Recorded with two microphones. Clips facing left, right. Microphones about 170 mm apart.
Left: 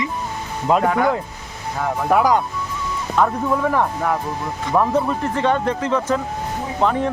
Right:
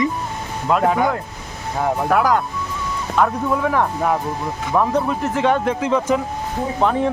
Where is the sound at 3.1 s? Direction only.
Centre (ahead or behind).